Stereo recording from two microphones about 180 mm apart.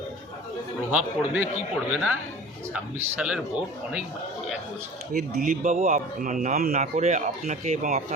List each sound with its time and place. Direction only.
0.9 s a man's voice: 10° right (ahead or behind)
5.3 s speech: 45° right (ahead or behind)